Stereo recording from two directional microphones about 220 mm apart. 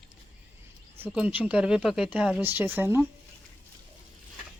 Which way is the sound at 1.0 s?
5° right (ahead or behind).